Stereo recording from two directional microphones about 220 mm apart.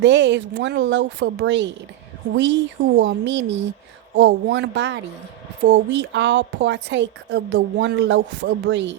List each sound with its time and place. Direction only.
0.0 s a woman's voice: 55° right (ahead or behind)